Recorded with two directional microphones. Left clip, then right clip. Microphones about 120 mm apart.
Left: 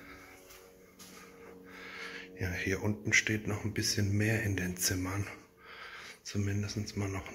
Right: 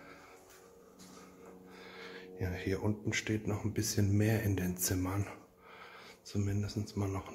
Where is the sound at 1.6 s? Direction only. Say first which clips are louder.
Left 6 dB; 15° right (ahead or behind).